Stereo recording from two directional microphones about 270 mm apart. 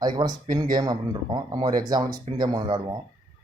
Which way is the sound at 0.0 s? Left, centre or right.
Centre.